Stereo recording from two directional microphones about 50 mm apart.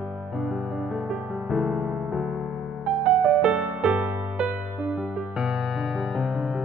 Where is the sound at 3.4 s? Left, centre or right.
Centre.